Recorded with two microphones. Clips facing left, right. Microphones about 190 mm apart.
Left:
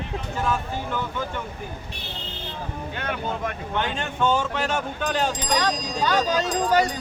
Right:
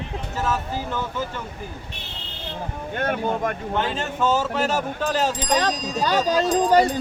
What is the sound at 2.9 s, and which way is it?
Speech, 50° right (ahead or behind).